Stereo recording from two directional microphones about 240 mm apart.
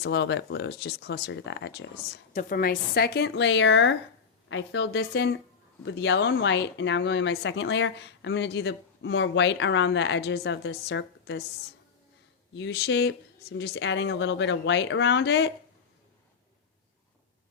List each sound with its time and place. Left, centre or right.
0.0 s speech: left
12.5 s speech: left